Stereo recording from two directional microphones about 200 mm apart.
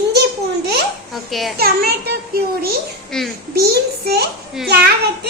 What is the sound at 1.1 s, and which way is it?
Speech, centre (ahead or behind).